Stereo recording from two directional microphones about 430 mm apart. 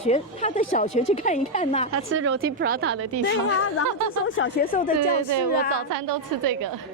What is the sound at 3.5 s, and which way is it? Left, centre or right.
Speech, left.